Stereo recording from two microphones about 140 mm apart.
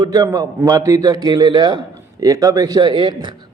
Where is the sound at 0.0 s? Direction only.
25° right (ahead or behind).